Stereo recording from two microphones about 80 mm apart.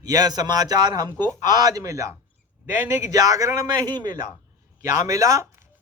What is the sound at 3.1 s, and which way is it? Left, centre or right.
Speech, right.